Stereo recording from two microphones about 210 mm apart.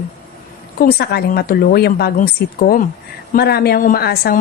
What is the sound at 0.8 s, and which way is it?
A woman's voice, 45° left (ahead or behind).